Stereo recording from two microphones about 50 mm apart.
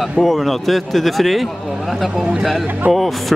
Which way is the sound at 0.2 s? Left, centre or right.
Centre.